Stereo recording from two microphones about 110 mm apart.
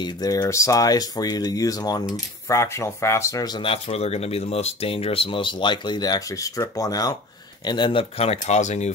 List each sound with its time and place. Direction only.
0.0 s speech: 35° left (ahead or behind)
2.4 s speech: 25° left (ahead or behind)
3.5 s speech: 55° left (ahead or behind); by 7.2 s 35° left (ahead or behind)
7.6 s speech: 45° left (ahead or behind); by 8.9 s 90° left